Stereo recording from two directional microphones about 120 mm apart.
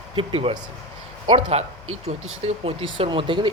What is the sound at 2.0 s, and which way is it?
Speech, 60° right (ahead or behind).